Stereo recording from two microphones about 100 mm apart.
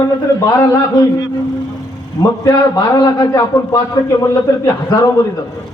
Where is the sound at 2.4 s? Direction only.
35° left (ahead or behind).